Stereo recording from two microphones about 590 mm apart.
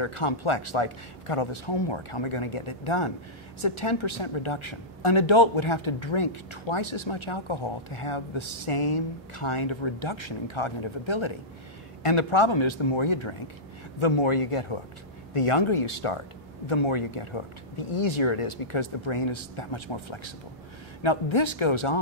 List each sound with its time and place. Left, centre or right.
0.0 s a woman's voice: left